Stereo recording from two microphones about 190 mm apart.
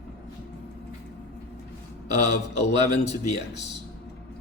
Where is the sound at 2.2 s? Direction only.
35° left (ahead or behind).